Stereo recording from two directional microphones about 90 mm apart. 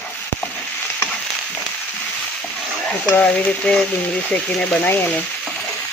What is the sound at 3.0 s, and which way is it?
Speech, 15° left (ahead or behind).